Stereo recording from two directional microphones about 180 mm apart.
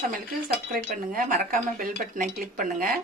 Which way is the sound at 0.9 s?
50° right (ahead or behind).